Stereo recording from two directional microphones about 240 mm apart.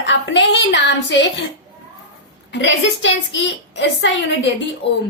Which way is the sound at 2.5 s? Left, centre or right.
Left.